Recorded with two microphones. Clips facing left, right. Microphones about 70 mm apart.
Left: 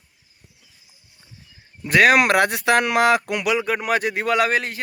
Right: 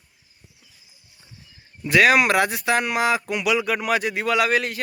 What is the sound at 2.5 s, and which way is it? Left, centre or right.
Speech, left.